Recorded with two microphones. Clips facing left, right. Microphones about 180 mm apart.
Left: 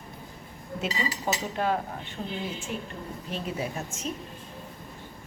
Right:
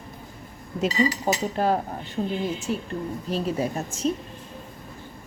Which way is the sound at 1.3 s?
40° right (ahead or behind).